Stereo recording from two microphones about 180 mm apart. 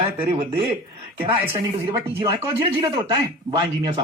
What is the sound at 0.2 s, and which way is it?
Speech, 30° right (ahead or behind).